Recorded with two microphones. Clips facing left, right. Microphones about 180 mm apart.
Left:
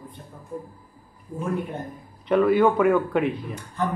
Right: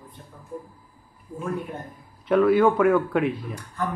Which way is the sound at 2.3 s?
Centre (ahead or behind).